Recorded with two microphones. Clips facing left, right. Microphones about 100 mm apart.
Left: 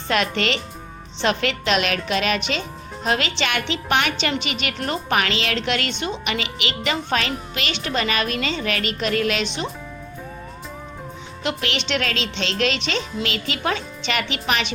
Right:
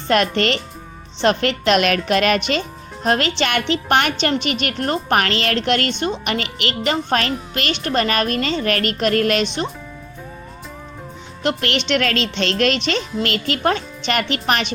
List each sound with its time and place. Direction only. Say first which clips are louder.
0.1 s a woman's voice: right 4 dB; 50° right (ahead or behind)
11.4 s a woman's voice: right 5 dB; 50° right (ahead or behind)